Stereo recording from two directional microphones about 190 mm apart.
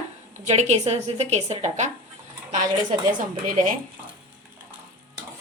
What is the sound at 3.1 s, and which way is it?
Speech, 45° right (ahead or behind).